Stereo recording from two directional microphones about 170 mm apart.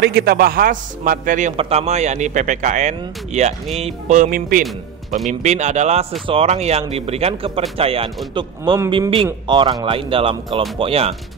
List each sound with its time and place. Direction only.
0.0 s a man's voice: 75° right (ahead or behind); by 1.5 s 50° right (ahead or behind)
1.6 s speech: 40° right (ahead or behind); by 4.6 s 55° right (ahead or behind)
5.4 s speech: 45° right (ahead or behind)
8.4 s speech: 20° right (ahead or behind)